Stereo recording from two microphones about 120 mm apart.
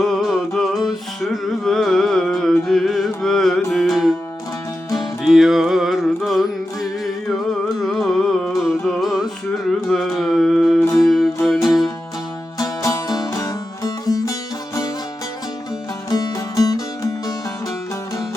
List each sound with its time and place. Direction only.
0.0 s music: centre (ahead or behind)
5.2 s music: centre (ahead or behind)
7.8 s music: centre (ahead or behind)
9.9 s a sound: centre (ahead or behind)
10.9 s music: centre (ahead or behind)
12.5 s music: 30° left (ahead or behind)
16.0 s music: 30° left (ahead or behind)